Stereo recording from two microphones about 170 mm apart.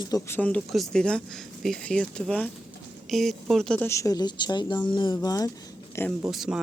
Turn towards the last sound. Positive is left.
turn(degrees=0)  # may be behind; listen again after turning